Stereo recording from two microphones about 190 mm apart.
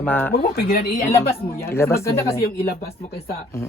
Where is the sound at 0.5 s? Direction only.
55° left (ahead or behind).